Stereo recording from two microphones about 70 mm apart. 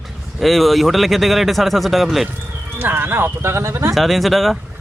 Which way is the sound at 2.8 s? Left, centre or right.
Right.